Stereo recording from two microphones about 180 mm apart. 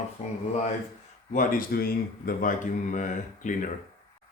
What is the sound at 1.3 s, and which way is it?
Speech, 50° left (ahead or behind).